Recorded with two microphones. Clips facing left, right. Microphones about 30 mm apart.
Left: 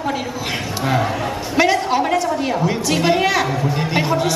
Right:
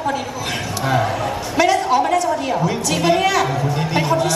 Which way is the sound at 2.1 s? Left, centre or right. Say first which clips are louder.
Right 1 dB; centre.